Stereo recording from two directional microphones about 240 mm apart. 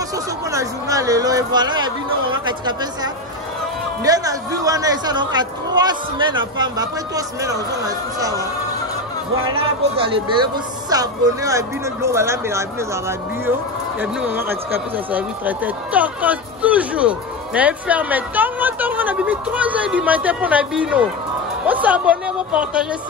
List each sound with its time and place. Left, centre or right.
0.5 s speech: centre
9.9 s a man's voice: right; by 22.8 s centre